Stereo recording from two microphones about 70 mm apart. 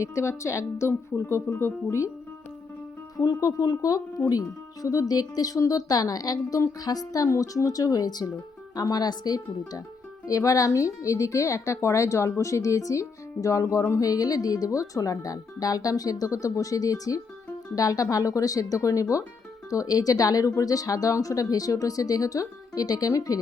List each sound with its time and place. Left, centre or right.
0.0 s speech: left
3.2 s speech: left
10.2 s speech: left